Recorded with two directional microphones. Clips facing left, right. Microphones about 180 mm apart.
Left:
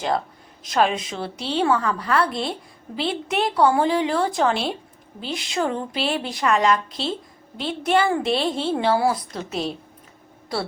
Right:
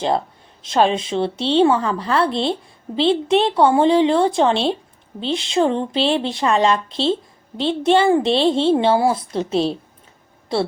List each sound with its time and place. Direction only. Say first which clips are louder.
0.6 s a woman's voice: right 4 dB; 25° right (ahead or behind)